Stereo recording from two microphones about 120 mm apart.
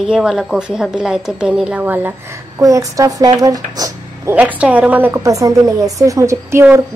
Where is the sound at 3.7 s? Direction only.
30° right (ahead or behind).